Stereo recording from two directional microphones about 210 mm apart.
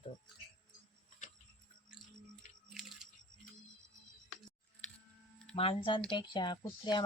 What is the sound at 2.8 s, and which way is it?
Music, centre (ahead or behind).